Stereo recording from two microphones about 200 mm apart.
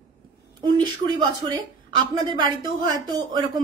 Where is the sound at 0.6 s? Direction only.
20° right (ahead or behind).